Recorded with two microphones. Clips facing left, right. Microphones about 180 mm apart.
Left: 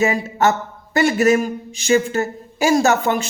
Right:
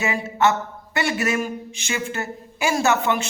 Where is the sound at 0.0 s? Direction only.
40° left (ahead or behind).